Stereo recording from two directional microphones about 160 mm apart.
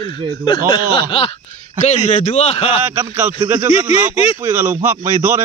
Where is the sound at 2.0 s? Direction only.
40° left (ahead or behind).